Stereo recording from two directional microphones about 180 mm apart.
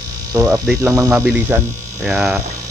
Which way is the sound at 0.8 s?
15° right (ahead or behind).